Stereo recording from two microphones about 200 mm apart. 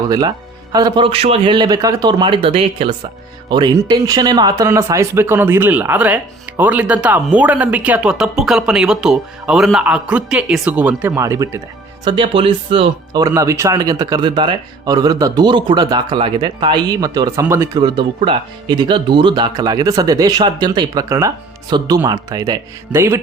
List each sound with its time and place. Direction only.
0.7 s speech: 20° right (ahead or behind)
12.0 s speech: 25° right (ahead or behind)